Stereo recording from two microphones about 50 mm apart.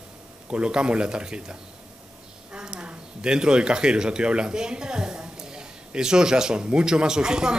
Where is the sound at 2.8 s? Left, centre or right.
Centre.